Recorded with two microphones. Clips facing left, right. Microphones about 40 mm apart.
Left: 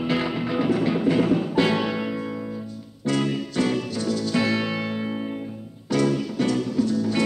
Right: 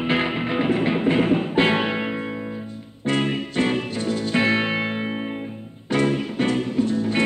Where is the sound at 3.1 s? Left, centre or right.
Right.